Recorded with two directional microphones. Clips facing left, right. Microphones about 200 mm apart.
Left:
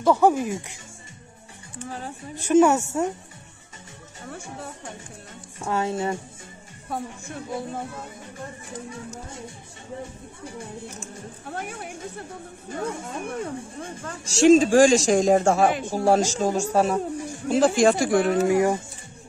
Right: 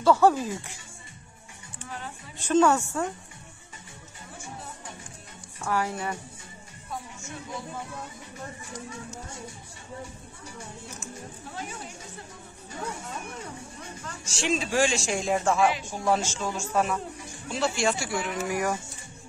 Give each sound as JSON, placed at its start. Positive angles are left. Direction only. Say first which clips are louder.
{"t": 0.0, "sound": "speech", "louder": "left 2 dB", "side_deg": 15}
{"t": 1.9, "sound": "speech", "louder": "left 5 dB", "side_deg": 40}
{"t": 2.4, "sound": "speech", "louder": "left 4 dB", "side_deg": 15}
{"t": 5.6, "sound": "speech", "louder": "left 4 dB", "side_deg": 25}
{"t": 6.9, "sound": "speech", "louder": "left 6 dB", "side_deg": 55}
{"t": 11.5, "sound": "speech", "louder": "left 6 dB", "side_deg": 55}
{"t": 17.5, "sound": "speech", "louder": "left 9 dB", "side_deg": 45}
{"t": 18.3, "sound": "speech", "louder": "left 9 dB", "side_deg": 30}